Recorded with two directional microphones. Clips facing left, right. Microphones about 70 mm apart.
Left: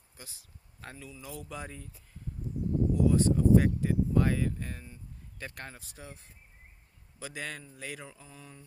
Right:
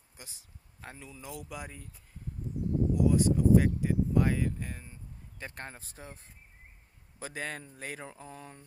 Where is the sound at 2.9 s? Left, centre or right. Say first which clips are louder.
Even; centre.